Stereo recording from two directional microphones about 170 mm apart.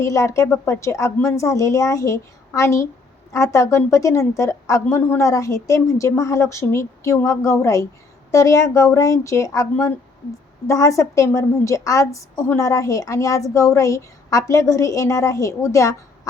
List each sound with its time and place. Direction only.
0.0 s a woman's voice: 20° left (ahead or behind)